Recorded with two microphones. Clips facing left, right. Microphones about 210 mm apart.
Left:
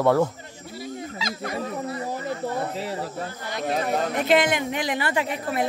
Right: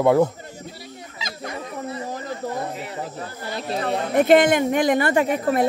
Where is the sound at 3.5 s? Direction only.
30° right (ahead or behind).